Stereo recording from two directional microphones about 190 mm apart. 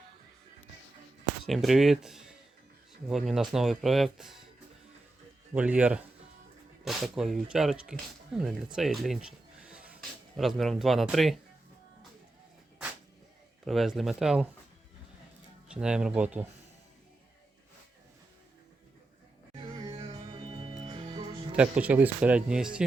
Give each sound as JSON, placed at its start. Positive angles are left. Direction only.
{"t": 1.5, "sound": "speech", "side_deg": 0}
{"t": 5.5, "sound": "speech", "side_deg": -5}
{"t": 13.7, "sound": "speech", "side_deg": 0}
{"t": 15.7, "sound": "speech", "side_deg": -5}
{"t": 19.5, "sound": "music", "side_deg": -20}
{"t": 21.5, "sound": "speech", "side_deg": -5}